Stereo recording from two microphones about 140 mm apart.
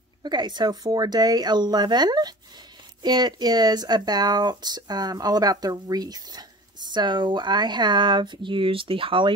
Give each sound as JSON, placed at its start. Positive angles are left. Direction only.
{"t": 0.2, "sound": "speech", "side_deg": -30}